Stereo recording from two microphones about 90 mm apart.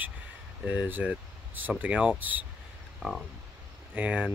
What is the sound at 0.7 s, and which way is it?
Speech, 15° right (ahead or behind).